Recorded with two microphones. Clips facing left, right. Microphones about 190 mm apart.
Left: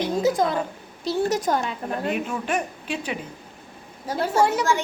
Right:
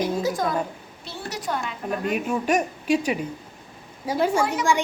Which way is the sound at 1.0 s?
40° left (ahead or behind).